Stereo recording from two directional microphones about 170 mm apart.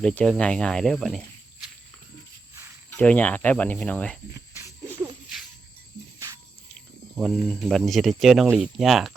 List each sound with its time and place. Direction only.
0.0 s speech: 5° left (ahead or behind)
2.9 s speech: 10° left (ahead or behind)
4.3 s cricket: 15° right (ahead or behind)
6.1 s cricket: 20° right (ahead or behind)
7.2 s speech: centre (ahead or behind)